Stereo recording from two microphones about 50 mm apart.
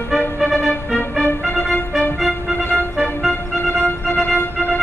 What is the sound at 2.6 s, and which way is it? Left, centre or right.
Music, left.